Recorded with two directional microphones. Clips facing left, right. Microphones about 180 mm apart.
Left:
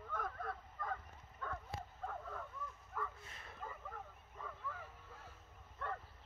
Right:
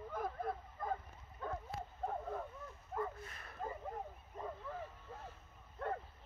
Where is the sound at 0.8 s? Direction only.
30° right (ahead or behind).